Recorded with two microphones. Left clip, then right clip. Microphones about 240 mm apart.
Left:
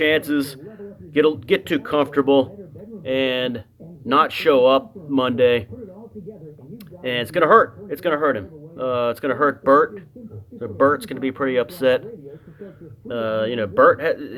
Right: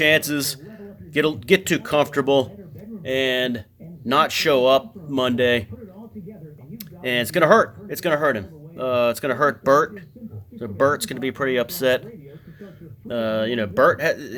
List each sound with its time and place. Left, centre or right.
0.0 s a man's voice: right
6.7 s speech: right